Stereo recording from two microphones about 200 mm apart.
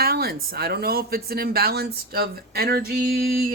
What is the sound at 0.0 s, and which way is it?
Speech, 50° right (ahead or behind).